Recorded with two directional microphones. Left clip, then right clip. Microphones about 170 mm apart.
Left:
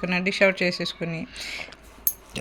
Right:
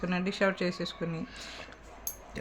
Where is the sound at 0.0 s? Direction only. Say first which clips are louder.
Left 9 dB; 10° left (ahead or behind).